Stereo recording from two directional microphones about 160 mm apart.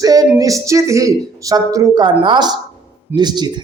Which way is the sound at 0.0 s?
20° right (ahead or behind).